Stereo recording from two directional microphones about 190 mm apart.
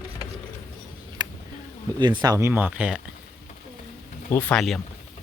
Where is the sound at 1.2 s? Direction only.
20° right (ahead or behind).